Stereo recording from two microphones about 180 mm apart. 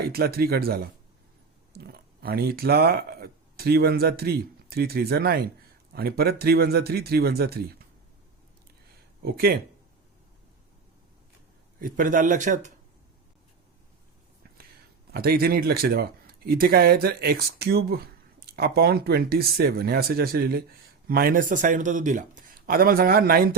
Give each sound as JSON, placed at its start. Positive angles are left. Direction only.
{"t": 0.1, "sound": "speech", "side_deg": -60}
{"t": 9.2, "sound": "speech", "side_deg": -55}
{"t": 11.8, "sound": "a man's voice", "side_deg": -50}
{"t": 15.1, "sound": "a man's voice", "side_deg": -60}